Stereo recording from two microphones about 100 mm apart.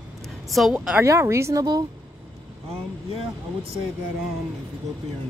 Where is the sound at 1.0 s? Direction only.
30° right (ahead or behind).